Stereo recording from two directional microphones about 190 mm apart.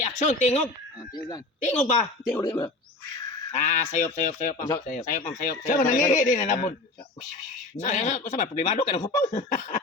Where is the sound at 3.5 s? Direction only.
40° left (ahead or behind).